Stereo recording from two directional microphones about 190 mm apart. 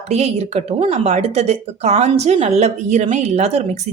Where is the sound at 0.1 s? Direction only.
35° right (ahead or behind).